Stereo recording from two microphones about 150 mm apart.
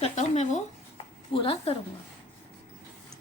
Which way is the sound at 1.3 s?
35° left (ahead or behind).